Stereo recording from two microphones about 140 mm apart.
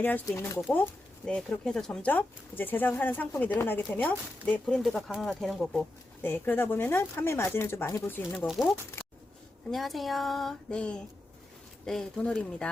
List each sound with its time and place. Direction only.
0.3 s speech: 20° left (ahead or behind); by 5.8 s centre (ahead or behind)
6.2 s speech: 15° left (ahead or behind)
8.3 s speech: centre (ahead or behind)
9.0 s a sound: 20° left (ahead or behind)
9.7 s speech: centre (ahead or behind)